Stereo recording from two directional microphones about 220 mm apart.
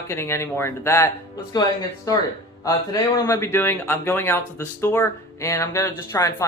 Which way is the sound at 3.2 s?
10° left (ahead or behind).